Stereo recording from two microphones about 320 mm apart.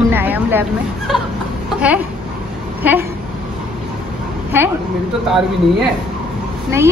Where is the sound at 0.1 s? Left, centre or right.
Centre.